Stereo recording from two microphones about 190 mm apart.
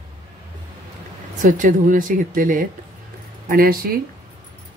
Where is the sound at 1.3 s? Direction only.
40° right (ahead or behind).